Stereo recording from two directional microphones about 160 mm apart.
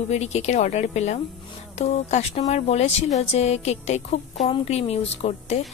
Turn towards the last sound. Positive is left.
turn(degrees=45)  # may be behind; listen again after turning